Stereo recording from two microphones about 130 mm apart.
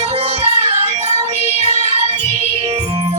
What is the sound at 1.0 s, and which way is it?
Music, 55° right (ahead or behind).